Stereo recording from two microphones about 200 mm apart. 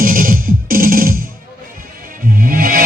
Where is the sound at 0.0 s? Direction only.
45° right (ahead or behind).